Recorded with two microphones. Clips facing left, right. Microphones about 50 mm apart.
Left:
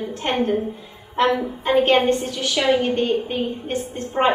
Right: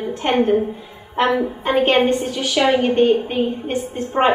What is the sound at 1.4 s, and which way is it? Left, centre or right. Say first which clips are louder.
A woman's voice: right 1 dB; centre.